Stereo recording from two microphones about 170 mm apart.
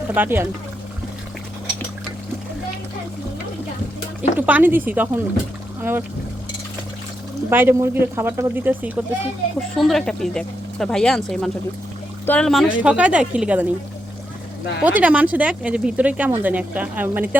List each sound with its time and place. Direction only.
0.1 s speech: 10° right (ahead or behind)
4.2 s speech: 10° right (ahead or behind)
7.5 s speech: 10° right (ahead or behind)
9.6 s speech: centre (ahead or behind)
14.8 s speech: 10° right (ahead or behind)